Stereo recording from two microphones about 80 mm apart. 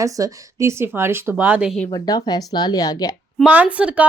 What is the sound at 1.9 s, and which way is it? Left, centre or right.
Speech, left.